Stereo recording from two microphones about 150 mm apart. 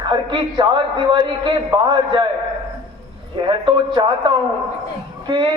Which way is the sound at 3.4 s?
35° right (ahead or behind).